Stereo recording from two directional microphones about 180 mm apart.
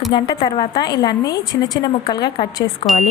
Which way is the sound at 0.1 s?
25° left (ahead or behind).